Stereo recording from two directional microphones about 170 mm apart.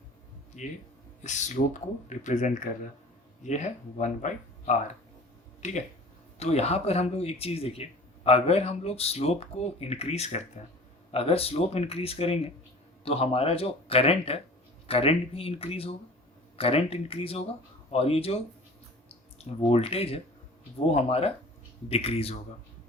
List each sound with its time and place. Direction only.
0.6 s speech: 45° left (ahead or behind)
19.4 s a sound: 40° left (ahead or behind)
19.7 s speech: 35° left (ahead or behind)